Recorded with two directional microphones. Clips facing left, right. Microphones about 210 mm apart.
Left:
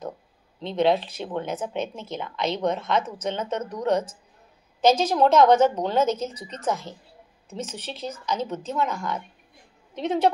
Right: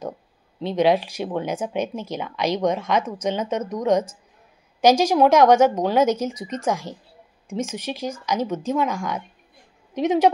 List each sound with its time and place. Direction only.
0.6 s speech: 10° right (ahead or behind)
8.8 s a woman's voice: 90° right
9.9 s speech: 10° right (ahead or behind)